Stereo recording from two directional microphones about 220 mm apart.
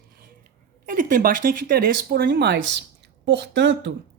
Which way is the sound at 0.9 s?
40° right (ahead or behind).